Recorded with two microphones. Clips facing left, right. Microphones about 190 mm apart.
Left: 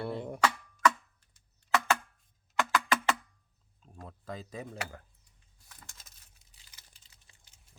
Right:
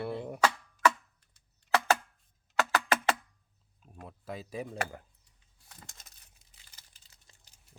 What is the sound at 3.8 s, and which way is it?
Speech, 10° right (ahead or behind).